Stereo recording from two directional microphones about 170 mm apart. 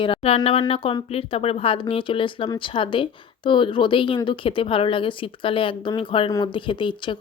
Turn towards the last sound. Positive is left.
turn(degrees=30)  # may be behind; listen again after turning